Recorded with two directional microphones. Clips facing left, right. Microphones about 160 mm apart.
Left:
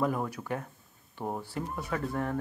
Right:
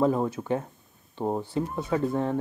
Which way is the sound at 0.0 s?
25° right (ahead or behind).